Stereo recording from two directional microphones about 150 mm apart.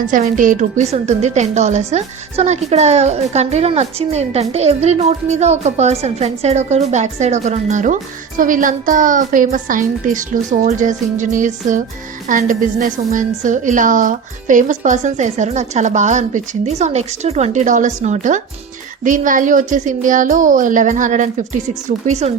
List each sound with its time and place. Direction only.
0.1 s a woman's voice: 60° right (ahead or behind)
10.7 s a woman's voice: 55° right (ahead or behind)